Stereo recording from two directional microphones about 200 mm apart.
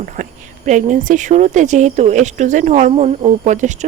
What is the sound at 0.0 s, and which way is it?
Speech, 40° right (ahead or behind).